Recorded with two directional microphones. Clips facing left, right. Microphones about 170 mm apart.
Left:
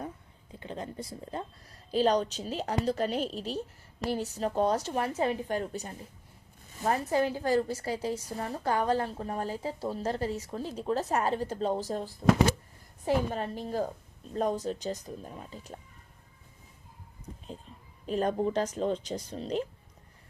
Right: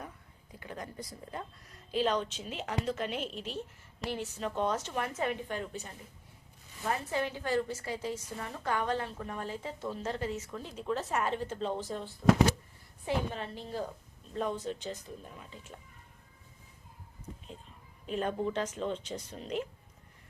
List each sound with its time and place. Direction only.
0.5 s a woman's voice: 25° left (ahead or behind)
18.0 s a woman's voice: 40° left (ahead or behind)